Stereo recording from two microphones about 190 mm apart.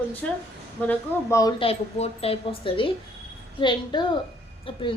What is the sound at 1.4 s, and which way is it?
A woman's voice, 30° left (ahead or behind).